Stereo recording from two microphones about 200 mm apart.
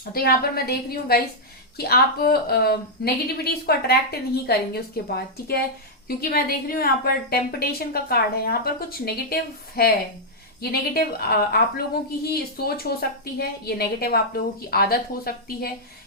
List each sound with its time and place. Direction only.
0.0 s a woman's voice: 50° left (ahead or behind)